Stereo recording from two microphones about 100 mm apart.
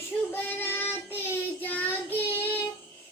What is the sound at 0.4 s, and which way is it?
Child singing, 20° left (ahead or behind).